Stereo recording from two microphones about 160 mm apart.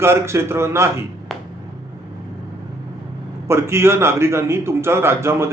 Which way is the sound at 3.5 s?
15° right (ahead or behind).